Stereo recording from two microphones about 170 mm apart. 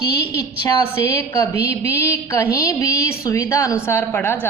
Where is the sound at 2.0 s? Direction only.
15° left (ahead or behind).